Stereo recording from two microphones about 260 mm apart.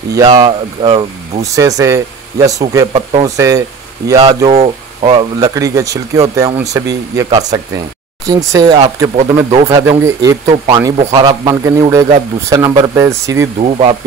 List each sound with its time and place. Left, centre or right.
0.1 s speech: centre
13.6 s speech: right